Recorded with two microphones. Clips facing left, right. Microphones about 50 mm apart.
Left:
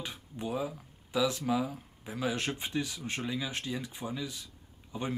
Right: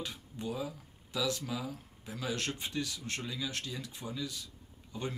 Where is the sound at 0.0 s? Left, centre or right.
Centre.